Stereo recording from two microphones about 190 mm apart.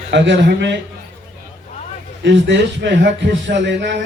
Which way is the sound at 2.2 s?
70° right (ahead or behind).